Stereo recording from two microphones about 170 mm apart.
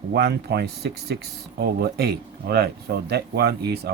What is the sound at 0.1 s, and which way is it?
Speech, 75° right (ahead or behind).